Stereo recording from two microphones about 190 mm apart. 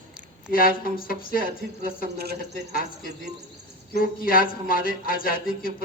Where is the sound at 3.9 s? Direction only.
50° left (ahead or behind).